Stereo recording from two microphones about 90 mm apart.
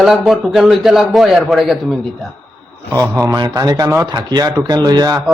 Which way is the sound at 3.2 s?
40° right (ahead or behind).